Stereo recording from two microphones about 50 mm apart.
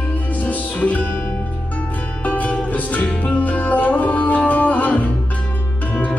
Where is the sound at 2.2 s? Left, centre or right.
Left.